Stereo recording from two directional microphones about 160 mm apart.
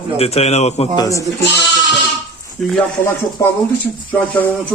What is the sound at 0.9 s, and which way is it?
Speech, 20° left (ahead or behind).